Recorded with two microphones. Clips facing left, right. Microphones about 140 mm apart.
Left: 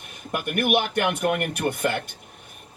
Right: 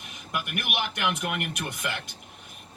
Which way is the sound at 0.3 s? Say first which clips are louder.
Left 9 dB; 45° left (ahead or behind).